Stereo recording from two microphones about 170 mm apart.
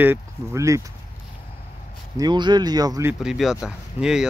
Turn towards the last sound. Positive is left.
turn(degrees=-5)  # may be behind; listen again after turning